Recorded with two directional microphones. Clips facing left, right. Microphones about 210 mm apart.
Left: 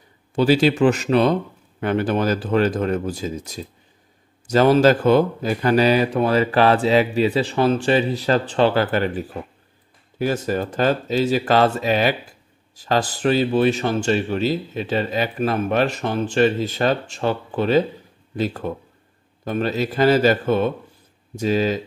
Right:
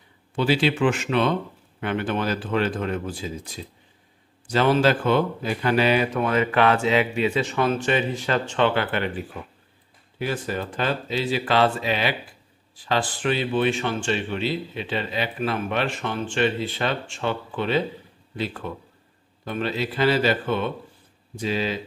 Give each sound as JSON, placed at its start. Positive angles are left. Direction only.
{"t": 0.4, "sound": "a man's voice", "side_deg": 40}